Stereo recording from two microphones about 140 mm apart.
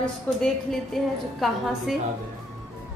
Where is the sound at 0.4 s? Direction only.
Centre (ahead or behind).